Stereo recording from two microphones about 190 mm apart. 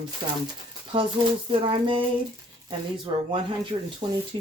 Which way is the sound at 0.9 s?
25° right (ahead or behind).